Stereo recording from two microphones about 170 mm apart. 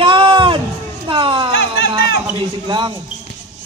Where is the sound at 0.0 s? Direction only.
30° right (ahead or behind).